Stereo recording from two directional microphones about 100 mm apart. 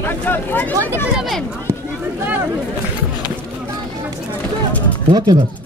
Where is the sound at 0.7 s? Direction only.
30° right (ahead or behind).